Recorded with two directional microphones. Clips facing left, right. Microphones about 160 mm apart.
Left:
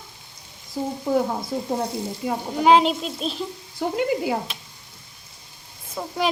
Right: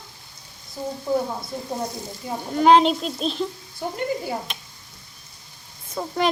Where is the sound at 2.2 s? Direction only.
70° left (ahead or behind).